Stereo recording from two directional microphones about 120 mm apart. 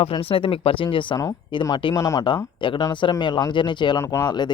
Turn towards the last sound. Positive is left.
turn(degrees=35)  # may be behind; listen again after turning